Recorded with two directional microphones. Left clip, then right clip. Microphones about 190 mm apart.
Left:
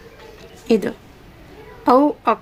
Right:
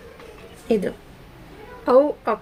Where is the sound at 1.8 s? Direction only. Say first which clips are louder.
Left 2 dB; 60° left (ahead or behind).